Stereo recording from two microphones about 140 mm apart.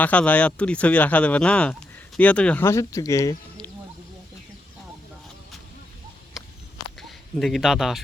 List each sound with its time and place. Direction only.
0.0 s speech: 10° left (ahead or behind)
2.6 s speech: 20° left (ahead or behind)
7.3 s speech: centre (ahead or behind)